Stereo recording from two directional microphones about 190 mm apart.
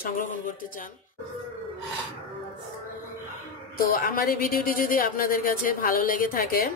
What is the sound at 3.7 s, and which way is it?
Speech, 50° left (ahead or behind).